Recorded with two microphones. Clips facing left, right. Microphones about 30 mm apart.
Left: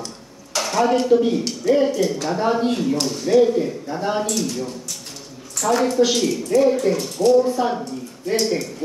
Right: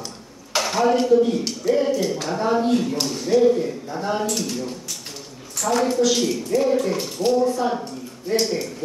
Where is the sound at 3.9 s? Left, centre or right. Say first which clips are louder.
Left 2 dB; centre.